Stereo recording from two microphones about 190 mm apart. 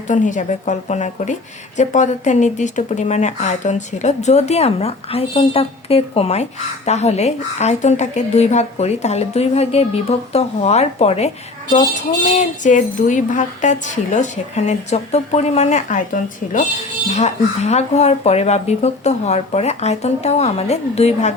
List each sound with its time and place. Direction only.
0.1 s a woman's voice: 40° left (ahead or behind)
12.4 s a woman's voice: 40° left (ahead or behind)